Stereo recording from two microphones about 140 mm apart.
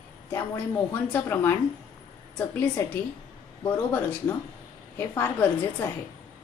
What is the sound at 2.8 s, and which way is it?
A woman's voice, 20° left (ahead or behind).